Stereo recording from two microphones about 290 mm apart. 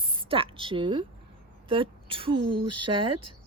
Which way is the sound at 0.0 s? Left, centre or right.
Centre.